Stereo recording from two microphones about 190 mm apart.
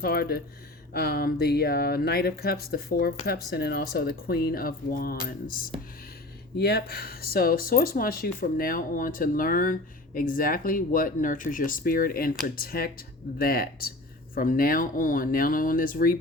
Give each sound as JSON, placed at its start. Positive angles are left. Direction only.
{"t": 0.0, "sound": "speech", "side_deg": 55}